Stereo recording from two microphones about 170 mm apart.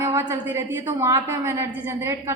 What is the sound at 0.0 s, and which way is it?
A woman's voice, 15° right (ahead or behind).